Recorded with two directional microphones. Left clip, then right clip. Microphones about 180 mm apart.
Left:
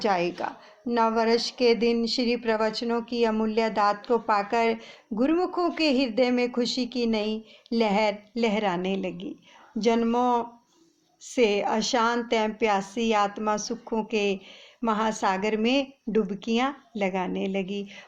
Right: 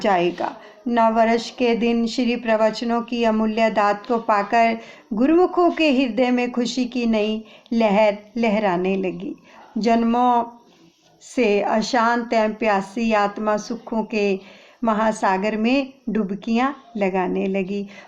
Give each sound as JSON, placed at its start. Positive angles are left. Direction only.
{"t": 0.0, "sound": "a woman's voice", "side_deg": 25}